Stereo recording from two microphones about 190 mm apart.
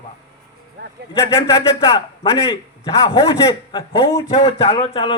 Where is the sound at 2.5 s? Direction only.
30° left (ahead or behind).